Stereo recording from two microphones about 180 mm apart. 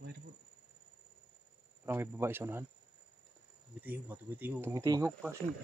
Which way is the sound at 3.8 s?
10° right (ahead or behind).